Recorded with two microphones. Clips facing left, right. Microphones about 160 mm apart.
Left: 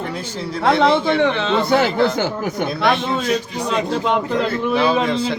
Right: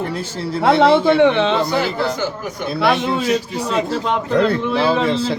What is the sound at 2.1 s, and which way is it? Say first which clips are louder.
Speech: left 3 dB; 65° left (ahead or behind).